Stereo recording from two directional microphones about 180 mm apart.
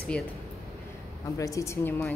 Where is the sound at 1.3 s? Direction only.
15° left (ahead or behind).